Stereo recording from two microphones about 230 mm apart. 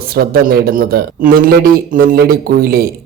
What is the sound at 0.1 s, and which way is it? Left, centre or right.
A man's voice, right.